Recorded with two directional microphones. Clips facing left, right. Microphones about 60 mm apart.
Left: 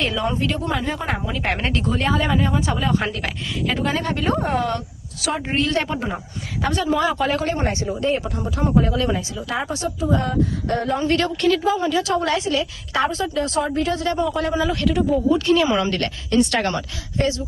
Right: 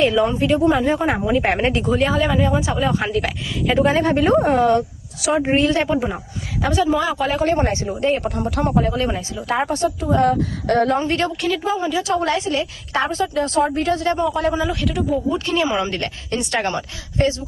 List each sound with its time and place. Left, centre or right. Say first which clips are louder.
0.0 s speech: right 5 dB; centre
2.0 s a woman's voice: even; centre
3.8 s a woman's voice: right 6 dB; right; by 7.4 s centre
7.4 s a woman's voice: right 4 dB; right
8.0 s speech: right 4 dB; right
8.7 s a woman's voice: even; right
10.7 s a woman's voice: right 11 dB; right
10.9 s speech: even; right
11.3 s speech: left 2 dB; centre
12.0 s a woman's voice: right 1 dB; right
14.7 s a woman's voice: left 1 dB; centre
15.3 s speech: left 3 dB; right
17.2 s a woman's voice: right 2 dB; right